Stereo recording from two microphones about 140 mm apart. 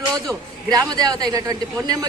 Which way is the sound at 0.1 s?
25° right (ahead or behind).